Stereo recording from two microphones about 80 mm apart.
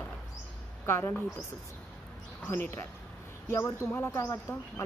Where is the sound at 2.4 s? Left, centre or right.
Left.